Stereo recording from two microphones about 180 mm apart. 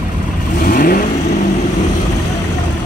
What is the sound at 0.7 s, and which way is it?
Vehicle, 55° left (ahead or behind).